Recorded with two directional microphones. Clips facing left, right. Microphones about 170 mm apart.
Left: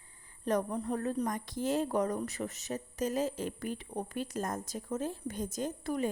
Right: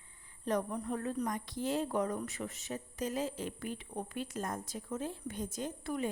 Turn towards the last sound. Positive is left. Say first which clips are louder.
# left 3 dB
turn(degrees=40)  # may be behind; listen again after turning